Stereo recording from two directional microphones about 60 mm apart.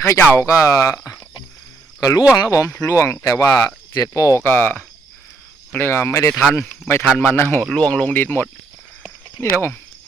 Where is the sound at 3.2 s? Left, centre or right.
Left.